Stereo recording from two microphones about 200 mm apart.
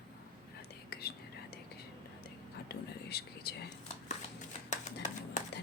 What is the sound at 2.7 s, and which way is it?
Whispering, 55° left (ahead or behind).